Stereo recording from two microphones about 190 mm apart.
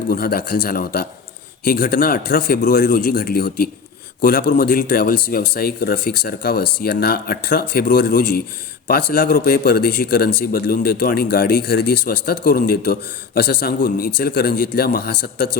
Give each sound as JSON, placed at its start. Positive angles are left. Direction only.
{"t": 0.1, "sound": "speech", "side_deg": 50}